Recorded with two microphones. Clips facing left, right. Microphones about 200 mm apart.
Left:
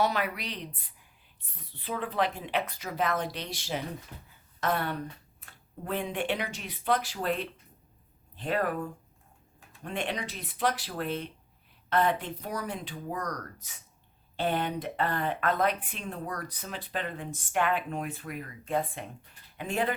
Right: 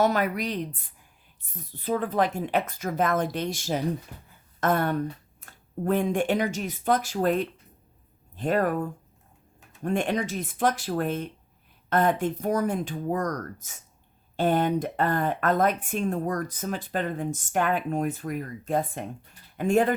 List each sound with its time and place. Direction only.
0.0 s a woman's voice: 45° right (ahead or behind)